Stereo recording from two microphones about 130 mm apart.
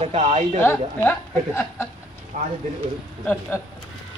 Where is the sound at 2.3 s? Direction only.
85° right.